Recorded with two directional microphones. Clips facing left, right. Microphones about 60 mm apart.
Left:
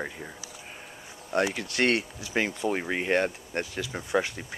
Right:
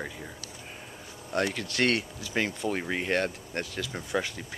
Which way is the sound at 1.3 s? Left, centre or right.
Centre.